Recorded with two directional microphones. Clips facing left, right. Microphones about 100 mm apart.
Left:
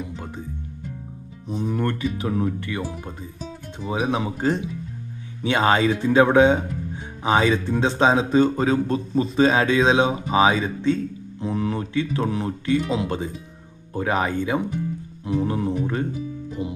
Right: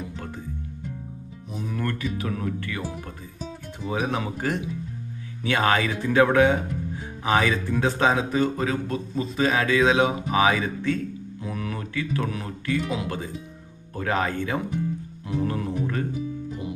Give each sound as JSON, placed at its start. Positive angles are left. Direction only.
{"t": 1.5, "sound": "speech", "side_deg": 30}